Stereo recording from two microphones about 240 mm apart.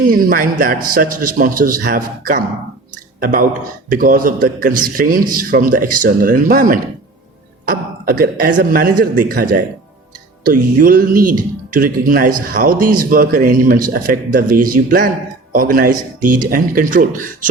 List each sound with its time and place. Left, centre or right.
0.0 s a man's voice: right